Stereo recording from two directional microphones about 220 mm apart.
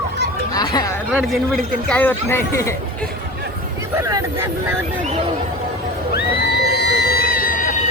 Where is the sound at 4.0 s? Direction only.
15° right (ahead or behind).